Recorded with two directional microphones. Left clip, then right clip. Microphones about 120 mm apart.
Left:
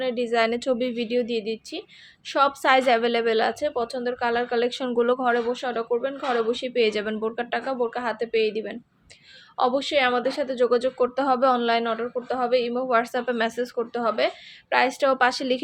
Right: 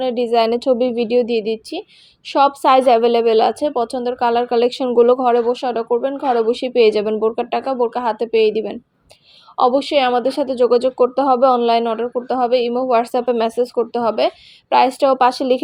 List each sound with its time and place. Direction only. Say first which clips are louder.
0.0 s a woman's voice: right 7 dB; 50° right (ahead or behind)
0.6 s a woman's voice: right 9 dB; 30° right (ahead or behind); by 4.9 s 45° right (ahead or behind)
4.9 s a woman's voice: right 10 dB; 35° right (ahead or behind)
7.5 s a woman's voice: right 7 dB; 55° right (ahead or behind); by 11.7 s 30° right (ahead or behind)
11.7 s a woman's voice: right 7 dB; 50° right (ahead or behind)
14.0 s a woman's voice: right 4 dB; 55° right (ahead or behind); by 15.6 s 30° right (ahead or behind)